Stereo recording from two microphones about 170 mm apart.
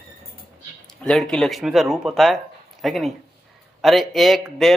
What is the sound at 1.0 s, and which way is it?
Speech, 5° left (ahead or behind).